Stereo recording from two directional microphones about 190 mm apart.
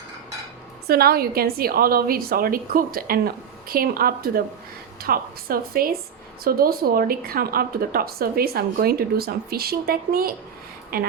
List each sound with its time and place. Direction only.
0.9 s speech: 55° right (ahead or behind)